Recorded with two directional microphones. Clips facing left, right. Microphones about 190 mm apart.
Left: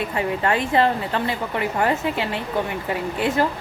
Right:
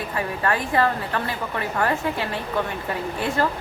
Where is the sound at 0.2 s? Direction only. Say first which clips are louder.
Left 2 dB; 20° left (ahead or behind).